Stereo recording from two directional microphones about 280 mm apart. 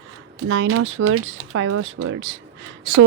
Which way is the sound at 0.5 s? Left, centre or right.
Right.